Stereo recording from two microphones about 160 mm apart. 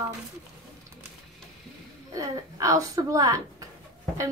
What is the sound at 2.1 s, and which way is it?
A woman's voice, 20° right (ahead or behind).